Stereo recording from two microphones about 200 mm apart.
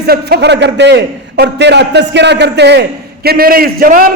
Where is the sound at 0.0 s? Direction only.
55° right (ahead or behind).